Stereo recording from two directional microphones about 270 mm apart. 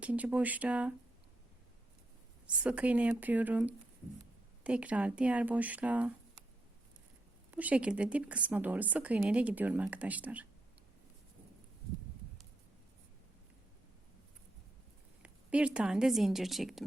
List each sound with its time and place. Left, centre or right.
0.0 s a woman's voice: centre
2.6 s a woman's voice: centre
7.5 s a woman's voice: centre
15.2 s a woman's voice: centre